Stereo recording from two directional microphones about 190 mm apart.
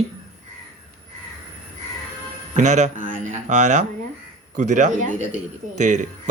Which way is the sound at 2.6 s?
40° right (ahead or behind).